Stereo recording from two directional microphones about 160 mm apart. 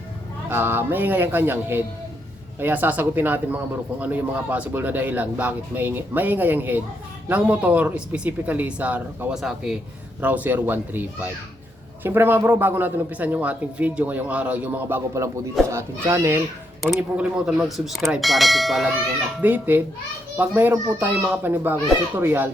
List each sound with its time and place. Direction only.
0.5 s a man's voice: 15° right (ahead or behind)
16.8 s a man's voice: 5° right (ahead or behind)